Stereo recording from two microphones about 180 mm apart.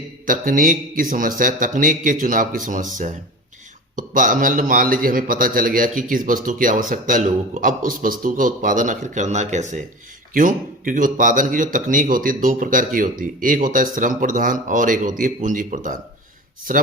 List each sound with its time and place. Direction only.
0.3 s a man's voice: 50° right (ahead or behind)